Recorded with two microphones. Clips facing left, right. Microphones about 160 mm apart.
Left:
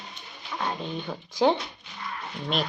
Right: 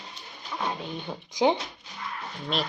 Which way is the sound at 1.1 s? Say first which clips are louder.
Left 1 dB; 10° right (ahead or behind).